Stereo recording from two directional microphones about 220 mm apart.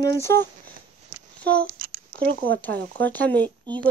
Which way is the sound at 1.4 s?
45° right (ahead or behind).